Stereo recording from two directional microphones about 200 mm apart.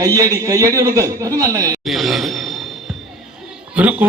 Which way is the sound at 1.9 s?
Centre (ahead or behind).